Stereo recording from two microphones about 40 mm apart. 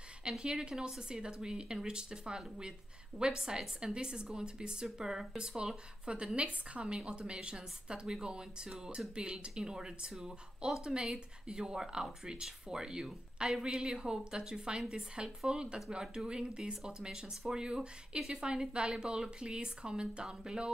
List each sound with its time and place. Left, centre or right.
0.2 s speech: right
6.0 s speech: right